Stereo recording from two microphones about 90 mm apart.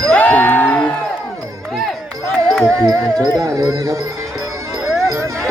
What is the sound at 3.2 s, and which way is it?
Speech, 40° right (ahead or behind).